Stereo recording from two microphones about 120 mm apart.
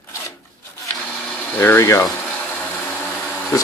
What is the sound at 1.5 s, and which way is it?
Speech, 20° left (ahead or behind).